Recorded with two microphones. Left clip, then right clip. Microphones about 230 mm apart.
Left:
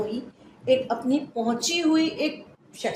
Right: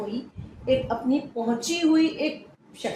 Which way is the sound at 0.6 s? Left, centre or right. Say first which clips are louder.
Left 2 dB; left.